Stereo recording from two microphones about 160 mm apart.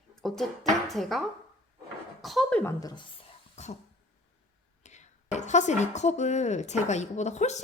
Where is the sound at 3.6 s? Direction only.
45° left (ahead or behind).